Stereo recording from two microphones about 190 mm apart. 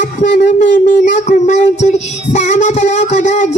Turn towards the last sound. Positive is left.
turn(degrees=40)  # may be behind; listen again after turning